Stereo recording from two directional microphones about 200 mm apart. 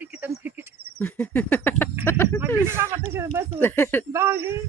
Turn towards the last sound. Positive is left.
turn(degrees=-10)  # may be behind; listen again after turning